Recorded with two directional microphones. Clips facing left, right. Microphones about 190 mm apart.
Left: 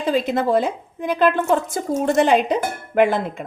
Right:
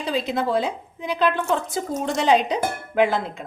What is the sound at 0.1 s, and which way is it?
A woman's voice, 50° left (ahead or behind).